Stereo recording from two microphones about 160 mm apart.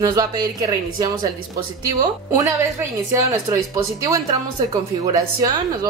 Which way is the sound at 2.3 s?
20° right (ahead or behind).